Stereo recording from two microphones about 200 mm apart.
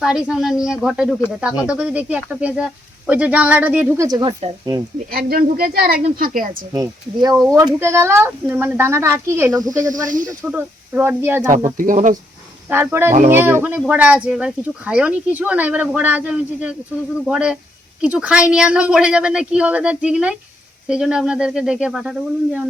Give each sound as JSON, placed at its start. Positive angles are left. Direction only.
{"t": 0.0, "sound": "speech", "side_deg": -5}
{"t": 5.1, "sound": "speech", "side_deg": -45}
{"t": 6.7, "sound": "speech", "side_deg": -20}
{"t": 7.3, "sound": "speech", "side_deg": 0}
{"t": 7.6, "sound": "speech", "side_deg": -15}
{"t": 9.9, "sound": "speech", "side_deg": -40}
{"t": 10.2, "sound": "speech", "side_deg": -10}
{"t": 11.8, "sound": "speech", "side_deg": -40}
{"t": 12.7, "sound": "speech", "side_deg": -10}